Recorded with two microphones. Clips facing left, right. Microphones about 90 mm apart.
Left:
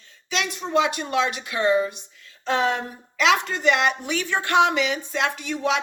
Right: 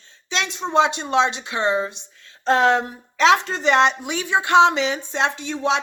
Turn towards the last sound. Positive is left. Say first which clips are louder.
# right 2 dB
turn(degrees=-25)  # may be behind; listen again after turning